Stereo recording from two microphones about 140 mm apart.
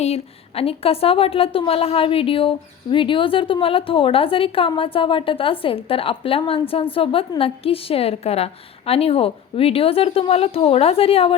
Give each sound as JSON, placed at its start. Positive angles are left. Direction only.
{"t": 0.0, "sound": "a woman's voice", "side_deg": 45}